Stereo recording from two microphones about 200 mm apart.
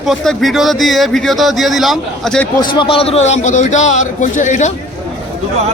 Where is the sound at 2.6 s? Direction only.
25° left (ahead or behind).